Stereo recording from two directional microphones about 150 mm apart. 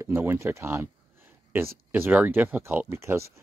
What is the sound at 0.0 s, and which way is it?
Speech, 15° right (ahead or behind).